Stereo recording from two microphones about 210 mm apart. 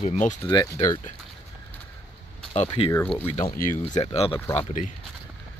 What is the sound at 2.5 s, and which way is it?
Speech, 30° left (ahead or behind).